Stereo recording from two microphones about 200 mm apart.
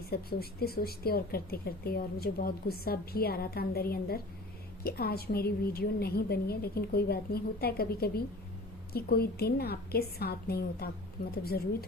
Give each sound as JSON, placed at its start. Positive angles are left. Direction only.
{"t": 0.1, "sound": "speech", "side_deg": 50}